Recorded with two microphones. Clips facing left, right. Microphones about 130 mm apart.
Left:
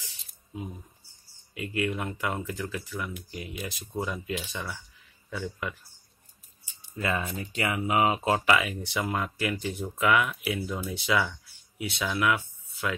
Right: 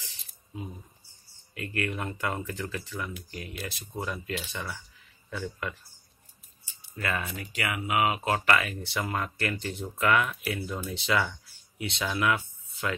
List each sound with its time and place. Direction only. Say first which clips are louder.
1.5 s speech: left 3 dB; 15° left (ahead or behind)
7.0 s speech: left 2 dB; 20° left (ahead or behind)
8.5 s speech: left 1 dB; 15° left (ahead or behind)